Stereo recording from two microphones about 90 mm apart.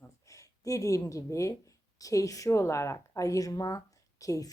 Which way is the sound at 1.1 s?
35° left (ahead or behind).